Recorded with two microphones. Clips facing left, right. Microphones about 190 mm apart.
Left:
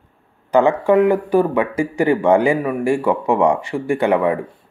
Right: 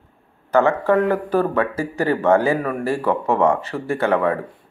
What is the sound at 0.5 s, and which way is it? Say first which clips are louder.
Speech: left 3 dB; 15° left (ahead or behind).